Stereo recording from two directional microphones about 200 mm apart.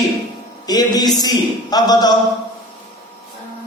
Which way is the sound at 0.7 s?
20° left (ahead or behind).